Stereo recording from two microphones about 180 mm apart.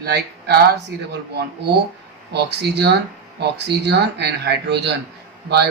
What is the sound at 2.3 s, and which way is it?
Speech, 70° right (ahead or behind).